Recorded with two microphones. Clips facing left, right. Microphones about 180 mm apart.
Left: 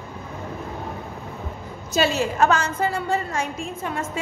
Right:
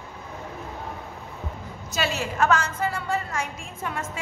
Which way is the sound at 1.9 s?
30° left (ahead or behind).